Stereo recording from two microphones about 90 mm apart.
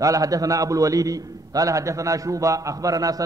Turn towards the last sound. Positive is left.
turn(degrees=-40)  # may be behind; listen again after turning